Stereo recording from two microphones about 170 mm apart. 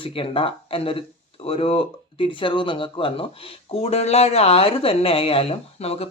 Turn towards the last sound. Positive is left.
turn(degrees=35)  # may be behind; listen again after turning